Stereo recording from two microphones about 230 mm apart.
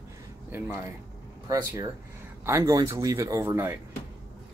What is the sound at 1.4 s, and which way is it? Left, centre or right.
Speech, centre.